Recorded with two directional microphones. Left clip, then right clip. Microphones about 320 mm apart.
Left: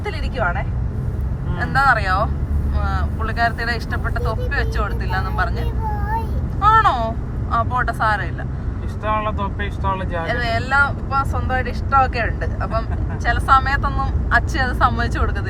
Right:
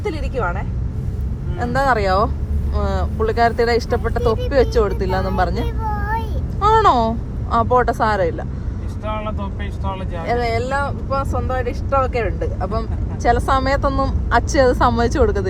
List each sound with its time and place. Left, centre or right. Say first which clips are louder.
1.5 s speech: left 1 dB; centre
6.6 s a sound: right 1 dB; centre
7.5 s speech: right 4 dB; centre
10.2 s speech: right 3 dB; centre